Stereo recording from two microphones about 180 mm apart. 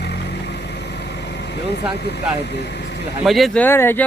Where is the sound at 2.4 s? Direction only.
70° left (ahead or behind).